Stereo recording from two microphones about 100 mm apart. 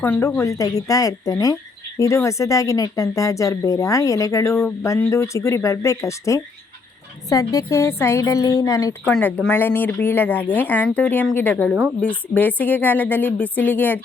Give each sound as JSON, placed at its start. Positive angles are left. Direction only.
{"t": 0.0, "sound": "speech", "side_deg": 25}
{"t": 9.5, "sound": "speech", "side_deg": 20}